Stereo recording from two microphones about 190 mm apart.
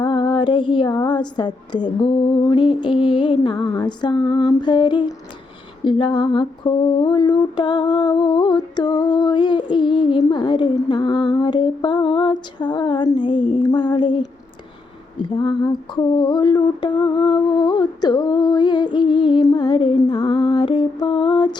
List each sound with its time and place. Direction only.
0.0 s mantra: 25° left (ahead or behind)
15.2 s mantra: 25° left (ahead or behind)